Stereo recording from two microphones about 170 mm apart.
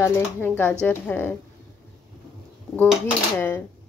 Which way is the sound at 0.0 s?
15° left (ahead or behind).